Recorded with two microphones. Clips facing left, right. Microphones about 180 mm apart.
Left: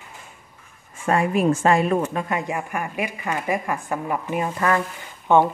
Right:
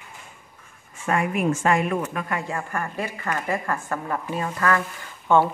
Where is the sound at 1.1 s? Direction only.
30° left (ahead or behind).